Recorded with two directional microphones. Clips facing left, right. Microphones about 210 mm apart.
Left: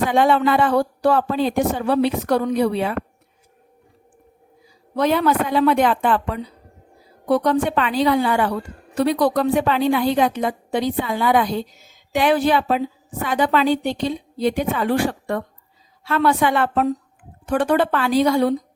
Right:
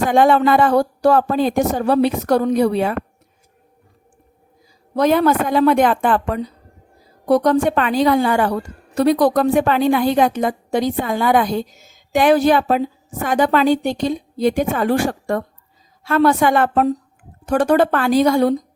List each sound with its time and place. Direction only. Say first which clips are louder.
0.1 s a woman's voice: right 5 dB; 45° right (ahead or behind)
4.9 s a woman's voice: right 3 dB; 45° right (ahead or behind)